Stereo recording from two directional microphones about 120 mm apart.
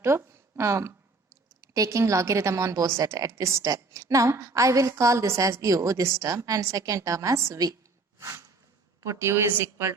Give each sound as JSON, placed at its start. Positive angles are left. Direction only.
{"t": 0.0, "sound": "a woman's voice", "side_deg": -20}
{"t": 9.0, "sound": "a woman's voice", "side_deg": -20}